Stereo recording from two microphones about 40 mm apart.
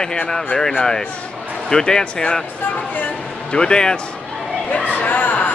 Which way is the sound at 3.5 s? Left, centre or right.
Left.